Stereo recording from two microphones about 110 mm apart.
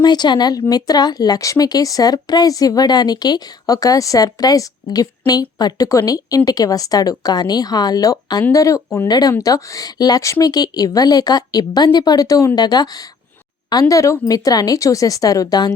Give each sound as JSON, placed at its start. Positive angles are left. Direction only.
{"t": 0.0, "sound": "speech", "side_deg": 40}